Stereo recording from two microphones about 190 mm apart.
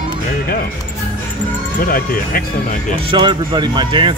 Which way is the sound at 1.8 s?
50° left (ahead or behind).